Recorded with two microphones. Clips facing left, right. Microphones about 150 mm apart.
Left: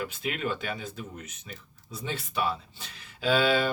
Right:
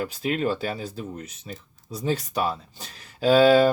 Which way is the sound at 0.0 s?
35° right (ahead or behind).